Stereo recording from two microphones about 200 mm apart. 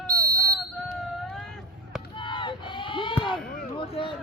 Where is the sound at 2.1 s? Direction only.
25° left (ahead or behind).